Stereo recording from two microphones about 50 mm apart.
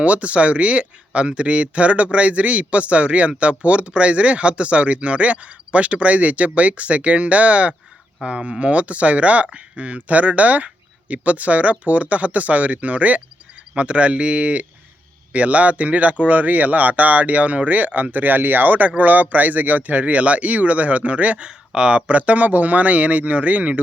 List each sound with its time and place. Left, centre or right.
0.0 s speech: right